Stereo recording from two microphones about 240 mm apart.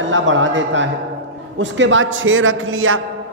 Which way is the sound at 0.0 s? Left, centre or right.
Right.